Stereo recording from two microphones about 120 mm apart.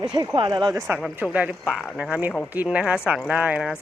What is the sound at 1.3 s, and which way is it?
Speech, 15° right (ahead or behind).